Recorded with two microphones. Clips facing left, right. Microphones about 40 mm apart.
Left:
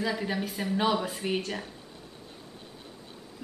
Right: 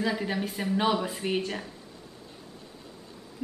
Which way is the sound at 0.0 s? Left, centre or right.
Centre.